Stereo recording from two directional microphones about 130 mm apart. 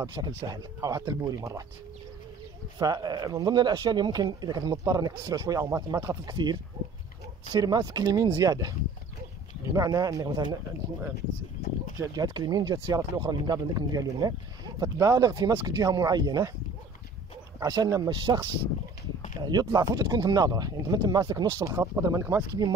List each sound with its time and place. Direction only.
0.0 s speech: 30° right (ahead or behind)
2.8 s speech: 30° right (ahead or behind)
9.8 s speech: 30° right (ahead or behind)
12.0 s speech: 30° right (ahead or behind)
17.6 s speech: 25° right (ahead or behind)